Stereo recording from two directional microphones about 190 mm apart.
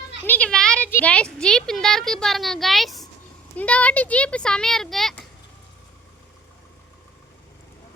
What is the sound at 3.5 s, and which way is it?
Speech, 5° left (ahead or behind).